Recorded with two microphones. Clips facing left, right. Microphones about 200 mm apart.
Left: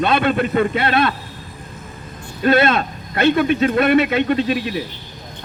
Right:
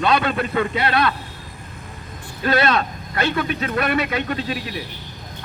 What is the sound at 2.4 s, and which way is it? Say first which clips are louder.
A man's voice: left 4 dB; 25° left (ahead or behind).